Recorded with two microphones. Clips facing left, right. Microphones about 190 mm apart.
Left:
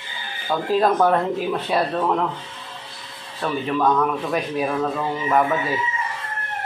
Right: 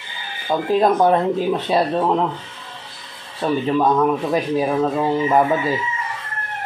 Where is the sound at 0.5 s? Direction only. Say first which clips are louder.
Right 2 dB; 15° right (ahead or behind).